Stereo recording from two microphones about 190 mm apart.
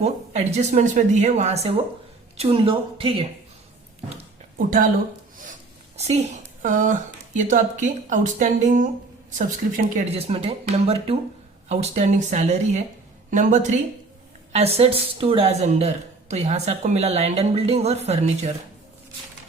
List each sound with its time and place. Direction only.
0.0 s a woman's voice: 35° right (ahead or behind)
4.5 s speech: 45° right (ahead or behind)
6.0 s a woman's voice: 35° right (ahead or behind)
10.2 s a woman's voice: 30° right (ahead or behind)